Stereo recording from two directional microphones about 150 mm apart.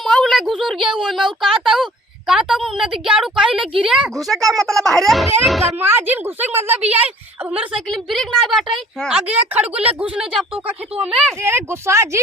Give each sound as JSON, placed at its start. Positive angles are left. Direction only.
{"t": 0.0, "sound": "a woman's voice", "side_deg": 0}
{"t": 5.8, "sound": "a woman's voice", "side_deg": -15}
{"t": 11.4, "sound": "a woman's voice", "side_deg": -15}